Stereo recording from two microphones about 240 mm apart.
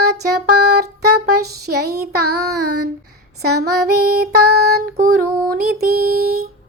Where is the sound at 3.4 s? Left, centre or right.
Right.